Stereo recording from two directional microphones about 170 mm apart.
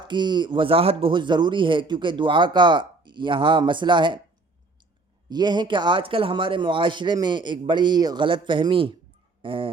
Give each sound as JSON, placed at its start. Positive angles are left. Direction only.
{"t": 0.0, "sound": "speech", "side_deg": -25}
{"t": 5.3, "sound": "speech", "side_deg": -25}